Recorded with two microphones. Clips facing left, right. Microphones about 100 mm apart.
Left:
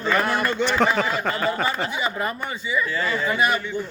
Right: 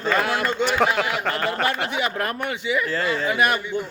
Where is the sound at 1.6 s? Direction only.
70° right (ahead or behind).